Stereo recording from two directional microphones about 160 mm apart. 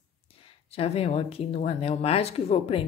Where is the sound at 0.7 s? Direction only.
40° left (ahead or behind).